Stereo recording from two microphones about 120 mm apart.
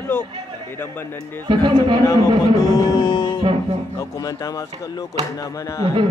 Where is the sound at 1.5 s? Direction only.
45° right (ahead or behind).